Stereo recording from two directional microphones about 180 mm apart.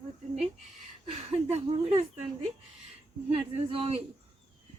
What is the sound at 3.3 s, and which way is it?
Speech, 30° right (ahead or behind).